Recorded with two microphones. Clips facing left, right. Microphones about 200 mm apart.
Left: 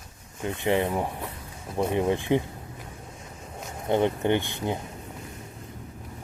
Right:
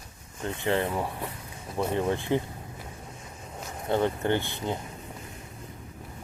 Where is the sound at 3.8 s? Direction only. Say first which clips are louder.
Left 2 dB; 20° left (ahead or behind).